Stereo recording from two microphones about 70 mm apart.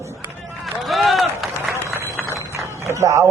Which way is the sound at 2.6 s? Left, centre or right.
Right.